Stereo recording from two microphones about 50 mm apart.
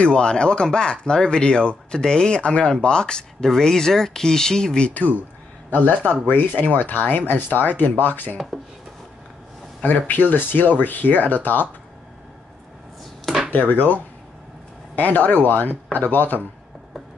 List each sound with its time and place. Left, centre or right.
0.0 s speech: centre
5.7 s speech: left
9.8 s speech: left
13.5 s speech: left